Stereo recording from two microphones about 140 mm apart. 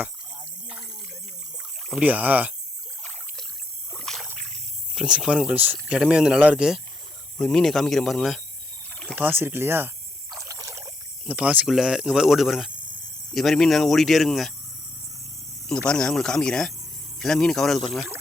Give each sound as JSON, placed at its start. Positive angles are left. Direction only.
{"t": 1.9, "sound": "speech", "side_deg": -10}
{"t": 3.9, "sound": "rowboat", "side_deg": 5}
{"t": 4.9, "sound": "speech", "side_deg": -5}
{"t": 7.3, "sound": "speech", "side_deg": 5}
{"t": 9.1, "sound": "speech", "side_deg": -15}
{"t": 10.4, "sound": "rowboat", "side_deg": -25}
{"t": 11.3, "sound": "speech", "side_deg": -10}
{"t": 15.9, "sound": "speech", "side_deg": 5}